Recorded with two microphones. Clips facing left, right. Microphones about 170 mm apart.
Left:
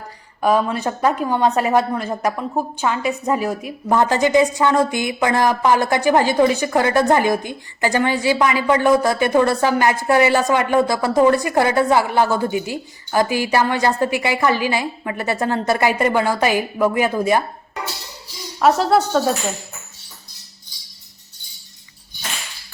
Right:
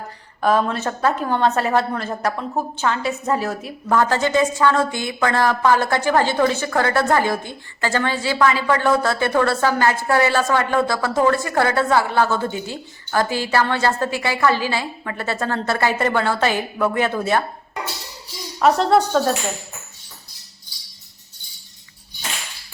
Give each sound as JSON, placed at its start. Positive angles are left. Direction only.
{"t": 0.4, "sound": "a woman's voice", "side_deg": 10}
{"t": 18.6, "sound": "speech", "side_deg": 5}